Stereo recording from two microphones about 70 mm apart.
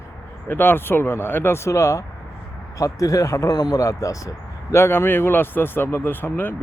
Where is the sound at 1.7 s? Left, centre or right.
Left.